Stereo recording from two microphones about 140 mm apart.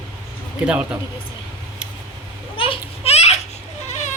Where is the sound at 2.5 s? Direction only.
40° left (ahead or behind).